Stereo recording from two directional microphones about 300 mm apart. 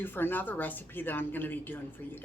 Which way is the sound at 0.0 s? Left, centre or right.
Centre.